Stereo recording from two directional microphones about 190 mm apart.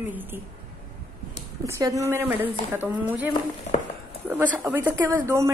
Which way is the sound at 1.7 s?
20° right (ahead or behind).